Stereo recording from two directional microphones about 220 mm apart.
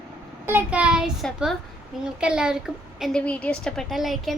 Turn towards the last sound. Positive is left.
turn(degrees=0)  # may be behind; listen again after turning